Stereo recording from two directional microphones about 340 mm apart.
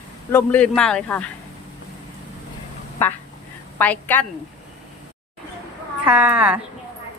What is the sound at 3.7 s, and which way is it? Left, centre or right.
Speech, centre.